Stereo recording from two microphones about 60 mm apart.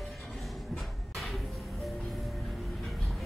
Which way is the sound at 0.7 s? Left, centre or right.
Centre.